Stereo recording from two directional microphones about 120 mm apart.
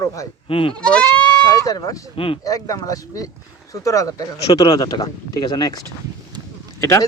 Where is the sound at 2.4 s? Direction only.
30° left (ahead or behind).